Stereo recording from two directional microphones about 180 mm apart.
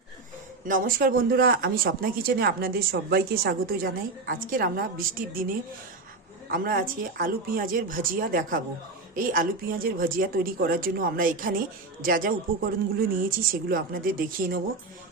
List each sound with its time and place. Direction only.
0.7 s speech: 50° right (ahead or behind)
6.5 s speech: 50° right (ahead or behind)